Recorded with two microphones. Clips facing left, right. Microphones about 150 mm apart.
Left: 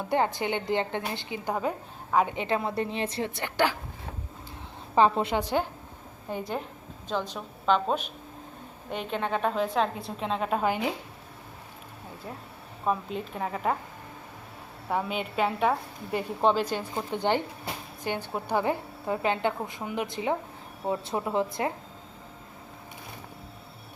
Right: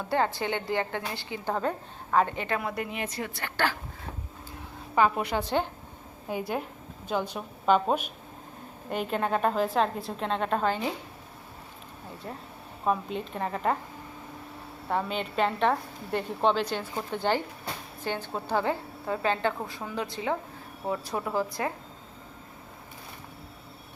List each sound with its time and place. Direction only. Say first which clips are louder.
0.1 s a woman's voice: left 1 dB; 20° left (ahead or behind)
2.4 s a woman's voice: left 3 dB; 25° left (ahead or behind)
4.9 s a woman's voice: left 2 dB; 25° left (ahead or behind)
6.2 s a woman's voice: right 1 dB; 5° right (ahead or behind); by 10.9 s 15° left (ahead or behind)
12.8 s a woman's voice: right 1 dB; centre (ahead or behind)
14.8 s a woman's voice: even; 5° left (ahead or behind)
16.9 s a woman's voice: left 1 dB; 15° left (ahead or behind)